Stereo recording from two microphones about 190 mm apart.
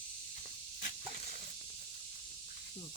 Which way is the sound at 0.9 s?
45° left (ahead or behind).